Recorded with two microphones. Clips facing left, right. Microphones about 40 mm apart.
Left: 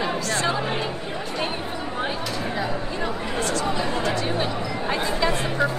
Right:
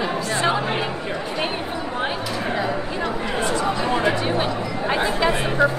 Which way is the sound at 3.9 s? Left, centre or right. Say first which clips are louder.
Right 4 dB; centre.